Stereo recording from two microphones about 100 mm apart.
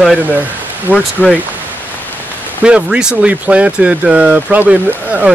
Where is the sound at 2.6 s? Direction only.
10° right (ahead or behind).